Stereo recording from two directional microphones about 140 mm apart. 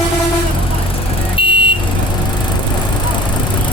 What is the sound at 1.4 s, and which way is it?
Vehicle, 40° left (ahead or behind).